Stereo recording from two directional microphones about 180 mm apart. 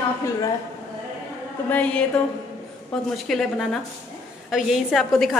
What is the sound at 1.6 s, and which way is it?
Speech, 5° left (ahead or behind).